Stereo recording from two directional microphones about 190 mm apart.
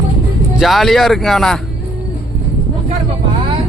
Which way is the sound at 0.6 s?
Centre (ahead or behind).